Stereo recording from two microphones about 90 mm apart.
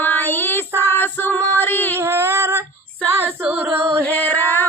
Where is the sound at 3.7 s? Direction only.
30° right (ahead or behind).